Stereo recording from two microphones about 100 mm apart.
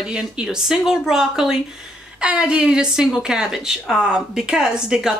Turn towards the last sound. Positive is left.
turn(degrees=-5)  # may be behind; listen again after turning